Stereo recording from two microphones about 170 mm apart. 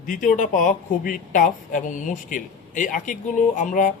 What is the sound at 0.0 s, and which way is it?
Speech, 50° left (ahead or behind).